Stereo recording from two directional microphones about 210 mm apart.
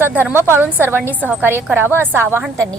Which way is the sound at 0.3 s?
10° right (ahead or behind).